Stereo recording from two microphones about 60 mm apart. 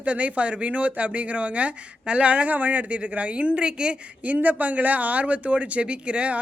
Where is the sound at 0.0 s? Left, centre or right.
Right.